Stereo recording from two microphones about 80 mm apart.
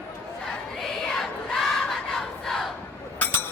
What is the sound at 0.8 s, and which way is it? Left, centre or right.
Battle cry, centre.